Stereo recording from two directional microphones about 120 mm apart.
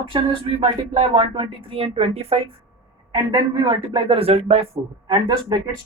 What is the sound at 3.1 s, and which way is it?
Speech, 40° right (ahead or behind).